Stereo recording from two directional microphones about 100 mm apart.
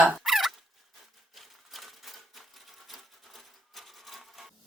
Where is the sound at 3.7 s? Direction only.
Centre (ahead or behind).